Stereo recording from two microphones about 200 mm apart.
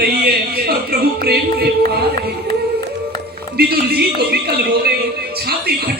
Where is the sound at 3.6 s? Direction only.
50° right (ahead or behind).